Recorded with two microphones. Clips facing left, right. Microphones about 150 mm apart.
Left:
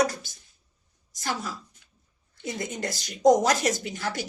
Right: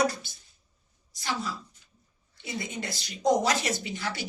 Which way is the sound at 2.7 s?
45° left (ahead or behind).